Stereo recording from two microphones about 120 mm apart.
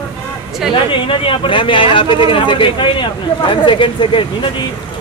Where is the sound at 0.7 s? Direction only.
45° left (ahead or behind).